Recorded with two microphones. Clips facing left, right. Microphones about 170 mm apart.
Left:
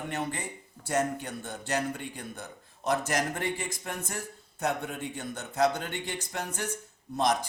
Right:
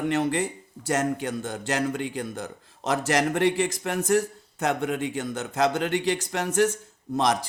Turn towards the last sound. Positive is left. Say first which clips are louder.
# right 3 dB
turn(degrees=-90)